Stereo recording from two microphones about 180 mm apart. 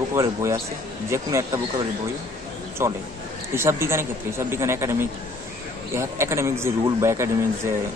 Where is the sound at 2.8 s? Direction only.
15° right (ahead or behind).